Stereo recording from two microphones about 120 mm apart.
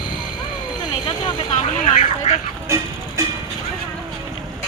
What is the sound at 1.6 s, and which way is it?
Speech, 80° left.